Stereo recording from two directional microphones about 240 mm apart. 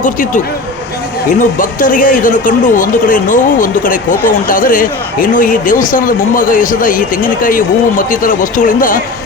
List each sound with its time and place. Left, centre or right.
0.0 s a man's voice: left